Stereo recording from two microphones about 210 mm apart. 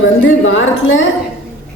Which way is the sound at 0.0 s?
65° left (ahead or behind).